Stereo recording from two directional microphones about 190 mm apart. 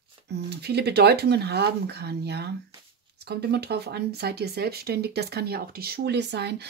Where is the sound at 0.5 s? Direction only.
60° right (ahead or behind).